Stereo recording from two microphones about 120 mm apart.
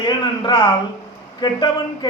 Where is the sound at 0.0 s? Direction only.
40° left (ahead or behind).